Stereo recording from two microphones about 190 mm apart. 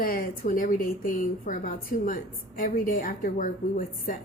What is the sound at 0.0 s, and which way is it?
A woman's voice, 50° left (ahead or behind).